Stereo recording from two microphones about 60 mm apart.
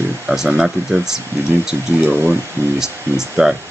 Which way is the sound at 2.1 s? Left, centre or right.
Right.